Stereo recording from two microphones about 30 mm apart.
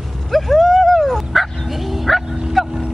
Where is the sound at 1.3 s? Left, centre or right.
Centre.